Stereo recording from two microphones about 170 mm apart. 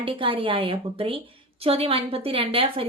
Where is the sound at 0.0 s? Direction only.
30° right (ahead or behind).